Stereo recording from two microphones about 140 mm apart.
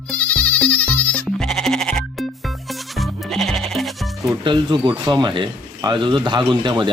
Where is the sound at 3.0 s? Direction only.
Centre (ahead or behind).